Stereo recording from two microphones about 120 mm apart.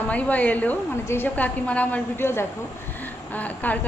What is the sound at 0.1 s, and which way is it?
A woman's voice, 10° left (ahead or behind).